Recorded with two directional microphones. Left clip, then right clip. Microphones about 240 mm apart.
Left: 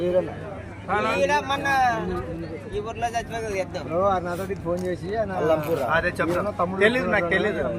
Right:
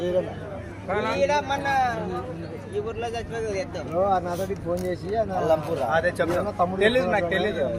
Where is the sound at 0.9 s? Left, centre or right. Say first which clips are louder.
Left 1 dB; left.